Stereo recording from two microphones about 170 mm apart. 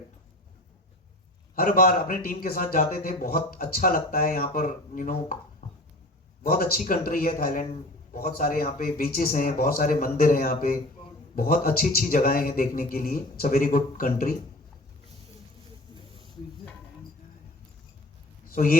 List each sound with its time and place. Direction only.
1.5 s a man's voice: 60° left (ahead or behind)
18.5 s a man's voice: 55° left (ahead or behind)